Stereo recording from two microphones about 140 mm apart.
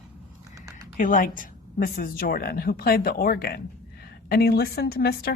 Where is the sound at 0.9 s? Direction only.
75° left (ahead or behind).